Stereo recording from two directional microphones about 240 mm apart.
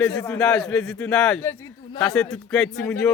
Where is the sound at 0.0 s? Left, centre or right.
Centre.